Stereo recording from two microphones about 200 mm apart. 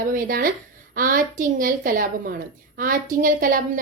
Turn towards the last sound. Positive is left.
turn(degrees=-45)  # may be behind; listen again after turning